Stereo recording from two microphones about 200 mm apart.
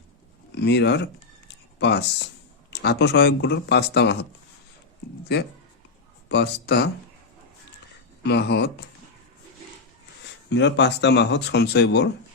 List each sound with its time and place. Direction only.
0.5 s speech: 60° left (ahead or behind)
6.2 s speech: 55° left (ahead or behind)
8.2 s speech: 55° left (ahead or behind)
10.5 s speech: 60° left (ahead or behind)